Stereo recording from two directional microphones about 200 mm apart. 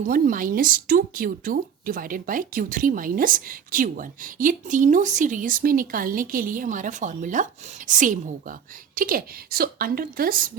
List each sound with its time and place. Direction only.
0.0 s a woman's voice: 45° right (ahead or behind)